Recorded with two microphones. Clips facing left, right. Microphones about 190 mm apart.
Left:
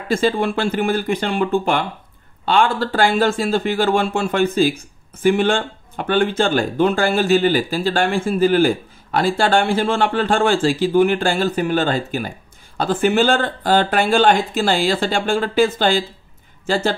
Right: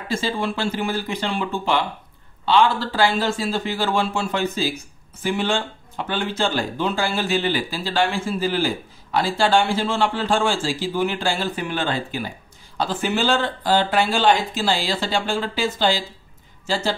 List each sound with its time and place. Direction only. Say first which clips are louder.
0.1 s speech: left 6 dB; 55° left (ahead or behind)